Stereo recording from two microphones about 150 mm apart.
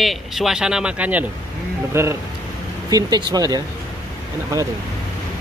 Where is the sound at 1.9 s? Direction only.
20° right (ahead or behind).